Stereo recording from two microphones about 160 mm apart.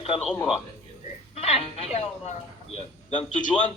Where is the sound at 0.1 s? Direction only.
35° left (ahead or behind).